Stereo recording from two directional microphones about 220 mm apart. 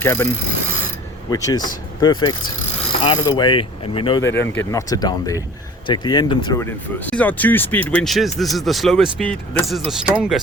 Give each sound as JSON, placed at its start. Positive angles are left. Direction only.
{"t": 0.0, "sound": "speech", "side_deg": 10}
{"t": 1.3, "sound": "mechanisms", "side_deg": 20}
{"t": 4.2, "sound": "speech", "side_deg": 10}
{"t": 5.9, "sound": "mechanisms", "side_deg": 20}
{"t": 7.1, "sound": "speech", "side_deg": 5}